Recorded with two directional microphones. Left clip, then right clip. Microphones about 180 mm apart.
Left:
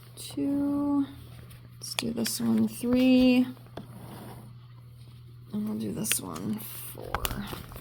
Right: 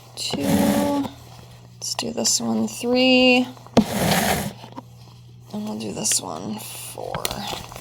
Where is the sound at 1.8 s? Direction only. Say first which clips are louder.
Right 7 dB; 35° left (ahead or behind).